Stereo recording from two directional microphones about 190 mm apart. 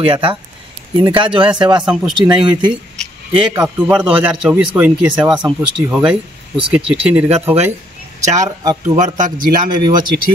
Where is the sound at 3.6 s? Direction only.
10° right (ahead or behind).